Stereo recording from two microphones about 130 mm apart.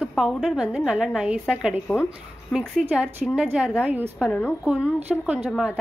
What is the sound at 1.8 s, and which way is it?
Speech, 15° left (ahead or behind).